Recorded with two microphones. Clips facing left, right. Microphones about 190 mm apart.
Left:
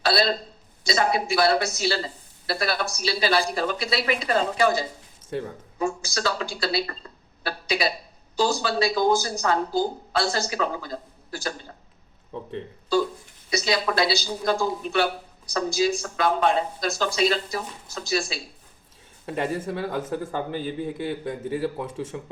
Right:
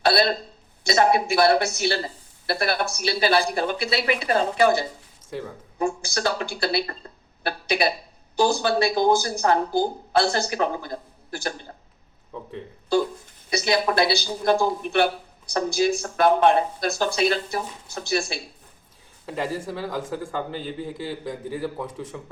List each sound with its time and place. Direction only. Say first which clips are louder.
0.0 s speech: right 2 dB; 55° right (ahead or behind)
13.6 s speech: right 3 dB; 55° right (ahead or behind)
19.2 s a man's voice: left 1 dB; 25° left (ahead or behind)